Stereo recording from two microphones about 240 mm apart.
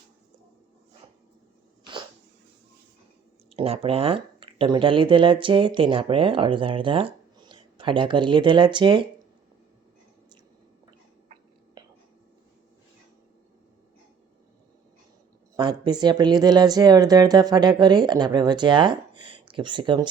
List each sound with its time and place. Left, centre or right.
3.5 s speech: right
15.5 s speech: centre